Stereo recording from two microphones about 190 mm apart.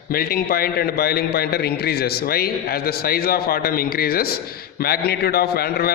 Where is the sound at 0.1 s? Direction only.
50° left (ahead or behind).